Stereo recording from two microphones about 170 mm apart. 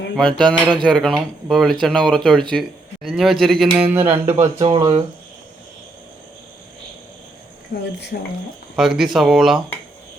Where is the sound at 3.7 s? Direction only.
10° right (ahead or behind).